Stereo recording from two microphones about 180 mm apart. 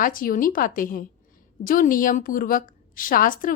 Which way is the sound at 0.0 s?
50° left (ahead or behind).